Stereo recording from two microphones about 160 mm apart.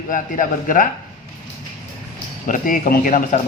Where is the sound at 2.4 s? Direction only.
55° left (ahead or behind).